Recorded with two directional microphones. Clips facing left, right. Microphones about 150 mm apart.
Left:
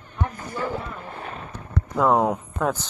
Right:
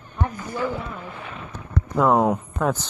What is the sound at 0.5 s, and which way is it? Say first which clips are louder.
Speech: right 1 dB; 40° left (ahead or behind).